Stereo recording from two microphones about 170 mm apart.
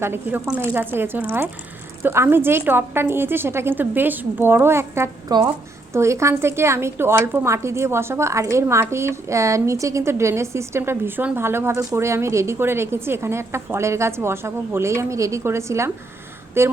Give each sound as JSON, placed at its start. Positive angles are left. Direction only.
{"t": 0.0, "sound": "a woman's voice", "side_deg": -10}